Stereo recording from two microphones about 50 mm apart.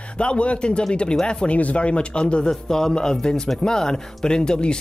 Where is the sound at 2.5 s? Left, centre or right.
Centre.